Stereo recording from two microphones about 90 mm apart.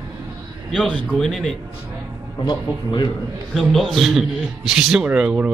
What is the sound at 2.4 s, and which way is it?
Speech, 55° left (ahead or behind).